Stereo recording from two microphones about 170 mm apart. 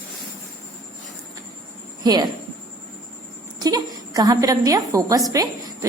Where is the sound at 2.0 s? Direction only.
25° right (ahead or behind).